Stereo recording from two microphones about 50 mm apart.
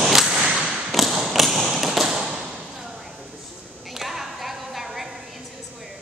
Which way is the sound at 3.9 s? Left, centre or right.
Centre.